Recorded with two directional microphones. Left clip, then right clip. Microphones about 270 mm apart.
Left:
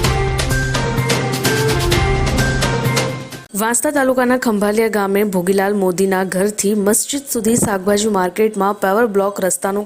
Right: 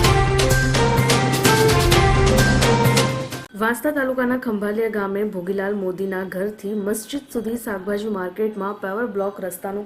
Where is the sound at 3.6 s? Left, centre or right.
Left.